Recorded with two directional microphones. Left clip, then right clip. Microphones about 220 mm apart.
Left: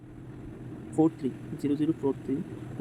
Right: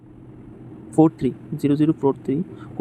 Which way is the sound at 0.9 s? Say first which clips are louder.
Right 9 dB; 15° right (ahead or behind).